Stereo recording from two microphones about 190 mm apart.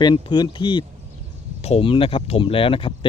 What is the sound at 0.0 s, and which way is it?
Speech, 25° left (ahead or behind).